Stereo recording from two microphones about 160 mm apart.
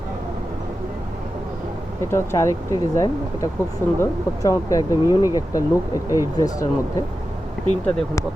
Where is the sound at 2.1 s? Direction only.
15° left (ahead or behind).